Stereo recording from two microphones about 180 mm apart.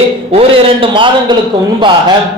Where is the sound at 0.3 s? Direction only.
30° right (ahead or behind).